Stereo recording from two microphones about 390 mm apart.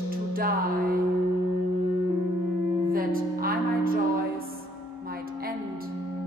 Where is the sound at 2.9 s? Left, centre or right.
Right.